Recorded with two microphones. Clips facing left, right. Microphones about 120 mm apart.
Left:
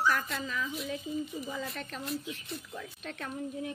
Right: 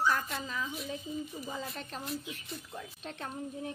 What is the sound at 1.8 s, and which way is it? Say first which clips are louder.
Speech: left 1 dB; 35° right (ahead or behind).